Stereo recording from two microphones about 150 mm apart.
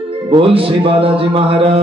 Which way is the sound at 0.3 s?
35° right (ahead or behind).